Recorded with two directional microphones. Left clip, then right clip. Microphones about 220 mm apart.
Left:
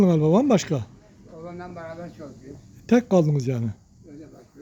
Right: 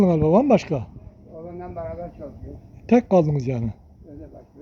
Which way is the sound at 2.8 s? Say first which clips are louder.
Right 2 dB; 15° left (ahead or behind).